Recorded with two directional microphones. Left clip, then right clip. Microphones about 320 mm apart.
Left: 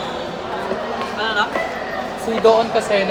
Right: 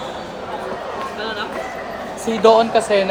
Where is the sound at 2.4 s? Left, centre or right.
Right.